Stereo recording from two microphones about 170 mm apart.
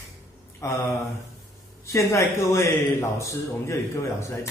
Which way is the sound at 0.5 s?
15° left (ahead or behind).